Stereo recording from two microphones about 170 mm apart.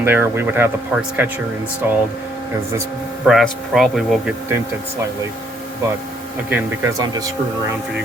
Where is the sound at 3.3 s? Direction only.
Centre (ahead or behind).